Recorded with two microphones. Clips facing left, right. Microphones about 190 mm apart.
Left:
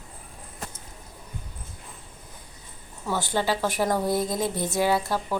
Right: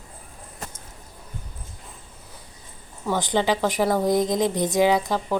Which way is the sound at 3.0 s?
15° right (ahead or behind).